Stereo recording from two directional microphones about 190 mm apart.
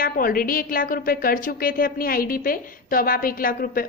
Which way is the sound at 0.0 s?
50° left (ahead or behind).